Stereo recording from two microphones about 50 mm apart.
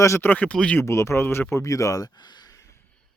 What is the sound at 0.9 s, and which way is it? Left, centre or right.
Speech, left.